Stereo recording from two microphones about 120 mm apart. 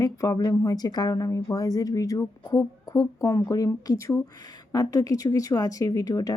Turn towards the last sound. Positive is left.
turn(degrees=30)  # may be behind; listen again after turning